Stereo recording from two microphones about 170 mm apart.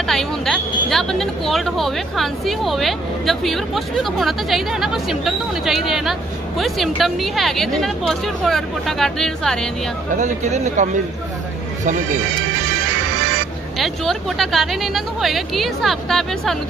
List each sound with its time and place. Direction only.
0.0 s speech: 5° left (ahead or behind)
10.1 s speech: 45° right (ahead or behind)
13.7 s speech: centre (ahead or behind)